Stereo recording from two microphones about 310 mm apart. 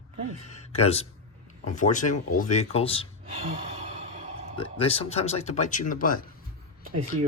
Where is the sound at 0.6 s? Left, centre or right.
Centre.